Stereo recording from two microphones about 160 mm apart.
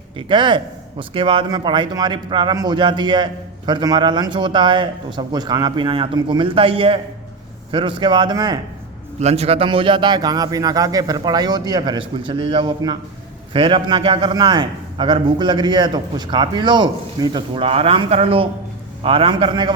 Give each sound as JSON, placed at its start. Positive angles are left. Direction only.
{"t": 0.2, "sound": "a man's voice", "side_deg": -30}
{"t": 9.2, "sound": "a man's voice", "side_deg": -40}